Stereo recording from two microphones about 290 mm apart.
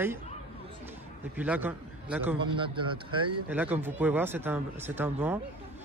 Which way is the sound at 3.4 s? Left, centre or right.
Centre.